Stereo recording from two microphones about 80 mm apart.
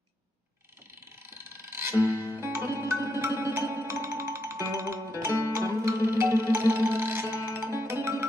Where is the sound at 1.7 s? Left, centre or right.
Right.